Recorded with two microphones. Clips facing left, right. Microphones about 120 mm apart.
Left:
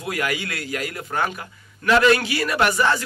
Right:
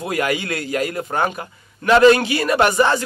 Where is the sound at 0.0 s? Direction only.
30° right (ahead or behind).